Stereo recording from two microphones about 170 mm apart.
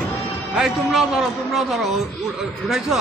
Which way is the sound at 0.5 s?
Centre (ahead or behind).